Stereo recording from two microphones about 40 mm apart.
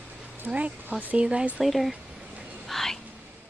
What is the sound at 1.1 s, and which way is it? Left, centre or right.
Speech, right.